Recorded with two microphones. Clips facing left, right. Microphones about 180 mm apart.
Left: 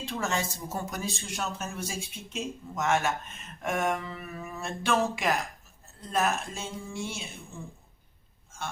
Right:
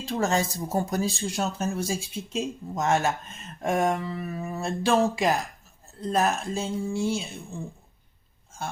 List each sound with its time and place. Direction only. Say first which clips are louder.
0.0 s speech: right 6 dB; 35° right (ahead or behind)